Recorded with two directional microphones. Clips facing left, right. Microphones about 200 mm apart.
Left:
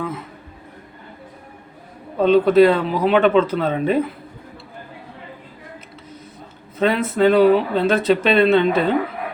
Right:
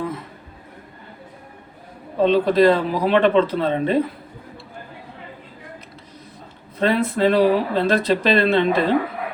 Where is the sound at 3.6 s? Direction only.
5° left (ahead or behind).